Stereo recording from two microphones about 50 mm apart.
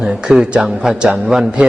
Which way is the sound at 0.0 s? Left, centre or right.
Centre.